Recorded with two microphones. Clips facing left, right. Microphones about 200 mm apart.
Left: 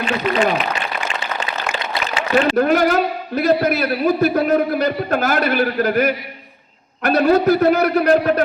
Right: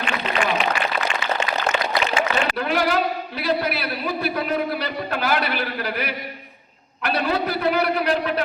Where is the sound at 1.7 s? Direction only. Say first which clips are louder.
Right 2 dB; 35° left (ahead or behind).